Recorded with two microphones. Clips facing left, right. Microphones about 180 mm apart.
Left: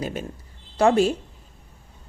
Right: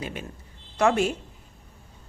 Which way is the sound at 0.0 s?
40° left (ahead or behind).